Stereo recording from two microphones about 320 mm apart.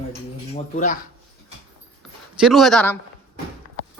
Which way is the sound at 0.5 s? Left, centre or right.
Left.